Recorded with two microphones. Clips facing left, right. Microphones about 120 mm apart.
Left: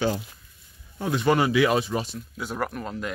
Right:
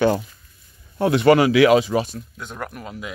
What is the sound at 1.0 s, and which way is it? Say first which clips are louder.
Speech: right 7 dB; 75° right (ahead or behind).